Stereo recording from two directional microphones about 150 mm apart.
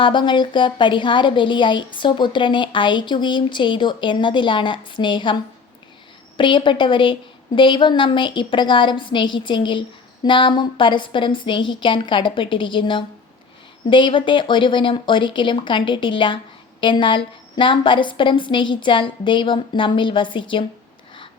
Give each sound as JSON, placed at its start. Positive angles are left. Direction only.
{"t": 0.0, "sound": "a woman's voice", "side_deg": 30}